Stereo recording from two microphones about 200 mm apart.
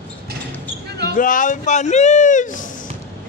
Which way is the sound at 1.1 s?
40° left (ahead or behind).